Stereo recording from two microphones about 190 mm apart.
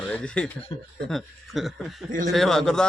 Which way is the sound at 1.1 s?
Centre (ahead or behind).